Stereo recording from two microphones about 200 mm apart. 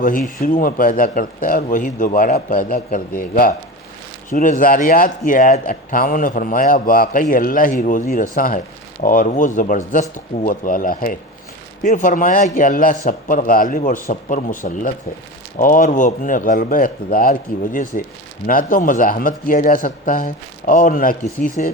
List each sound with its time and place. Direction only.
0.3 s a man's voice: 45° left (ahead or behind)